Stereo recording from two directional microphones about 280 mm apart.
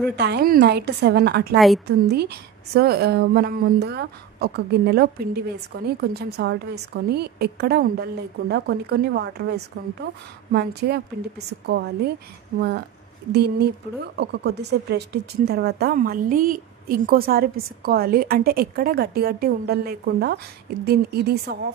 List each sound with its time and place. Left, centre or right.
0.1 s speech: right